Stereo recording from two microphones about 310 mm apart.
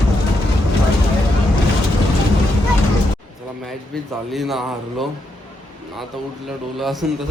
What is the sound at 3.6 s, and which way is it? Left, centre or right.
A man's voice, centre.